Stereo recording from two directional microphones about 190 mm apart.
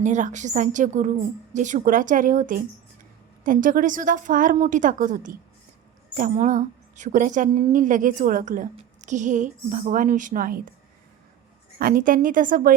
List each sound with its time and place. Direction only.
0.0 s a woman's voice: 40° right (ahead or behind)
11.8 s a woman's voice: 50° right (ahead or behind)